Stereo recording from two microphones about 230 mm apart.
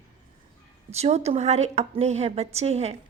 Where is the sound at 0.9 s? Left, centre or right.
Right.